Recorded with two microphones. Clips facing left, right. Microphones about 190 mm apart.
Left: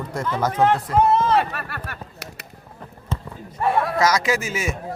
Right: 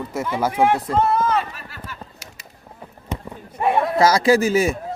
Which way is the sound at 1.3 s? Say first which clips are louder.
Left 3 dB; 65° left (ahead or behind).